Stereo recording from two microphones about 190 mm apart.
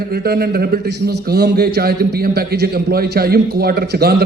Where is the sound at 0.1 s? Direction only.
55° right (ahead or behind).